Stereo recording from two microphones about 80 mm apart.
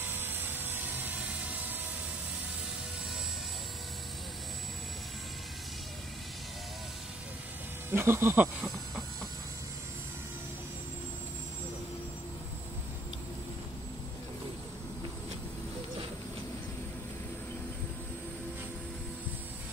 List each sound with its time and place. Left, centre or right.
0.0 s vehicle: right
7.9 s speech: right
8.6 s snake: centre